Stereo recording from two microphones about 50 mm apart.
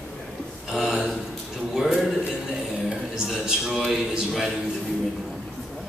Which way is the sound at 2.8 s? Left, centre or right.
Centre.